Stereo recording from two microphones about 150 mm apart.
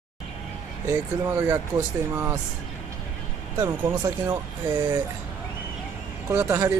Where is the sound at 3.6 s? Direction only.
25° right (ahead or behind).